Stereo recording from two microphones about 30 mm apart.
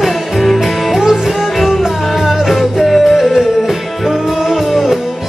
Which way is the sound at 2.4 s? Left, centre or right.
Centre.